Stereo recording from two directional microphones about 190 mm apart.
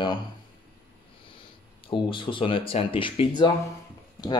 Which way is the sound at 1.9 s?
25° left (ahead or behind).